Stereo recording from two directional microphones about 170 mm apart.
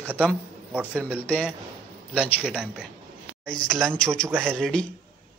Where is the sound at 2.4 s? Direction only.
5° right (ahead or behind).